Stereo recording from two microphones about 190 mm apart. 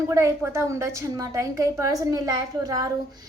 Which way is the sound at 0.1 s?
15° right (ahead or behind).